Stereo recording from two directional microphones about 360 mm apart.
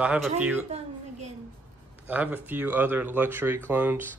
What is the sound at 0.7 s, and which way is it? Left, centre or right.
Speech, centre.